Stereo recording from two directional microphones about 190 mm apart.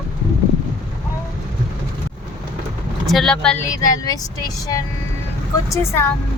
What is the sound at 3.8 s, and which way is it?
Speech, 20° left (ahead or behind).